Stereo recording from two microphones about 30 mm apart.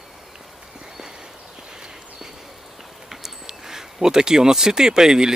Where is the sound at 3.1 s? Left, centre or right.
Centre.